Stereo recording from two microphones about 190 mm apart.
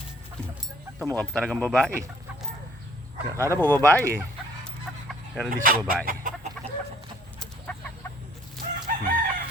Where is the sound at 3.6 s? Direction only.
10° left (ahead or behind).